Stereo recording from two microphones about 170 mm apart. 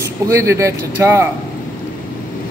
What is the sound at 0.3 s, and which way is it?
A man's voice, 15° right (ahead or behind).